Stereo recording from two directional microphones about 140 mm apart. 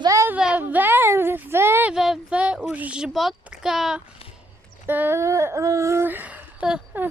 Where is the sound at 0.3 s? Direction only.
10° right (ahead or behind).